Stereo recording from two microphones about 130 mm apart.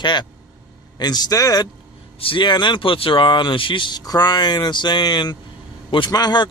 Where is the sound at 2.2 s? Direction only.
40° left (ahead or behind).